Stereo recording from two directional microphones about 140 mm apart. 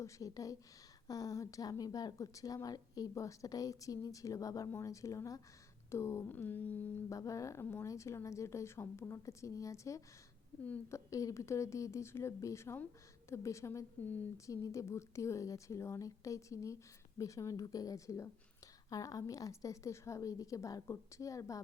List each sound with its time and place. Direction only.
0.0 s a woman's voice: 25° left (ahead or behind)
7.1 s a woman's voice: 25° left (ahead or behind)
10.6 s speech: 10° left (ahead or behind)
11.1 s a woman's voice: 25° left (ahead or behind)